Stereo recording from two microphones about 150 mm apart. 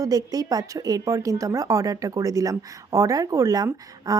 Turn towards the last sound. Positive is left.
turn(degrees=-25)  # may be behind; listen again after turning